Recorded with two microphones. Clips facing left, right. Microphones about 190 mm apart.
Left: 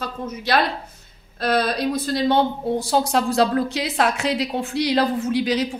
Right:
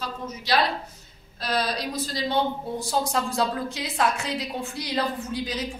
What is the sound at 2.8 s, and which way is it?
A woman's voice, 75° left (ahead or behind).